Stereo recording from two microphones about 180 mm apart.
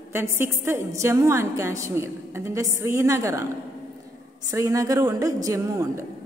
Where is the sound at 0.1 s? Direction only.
15° right (ahead or behind).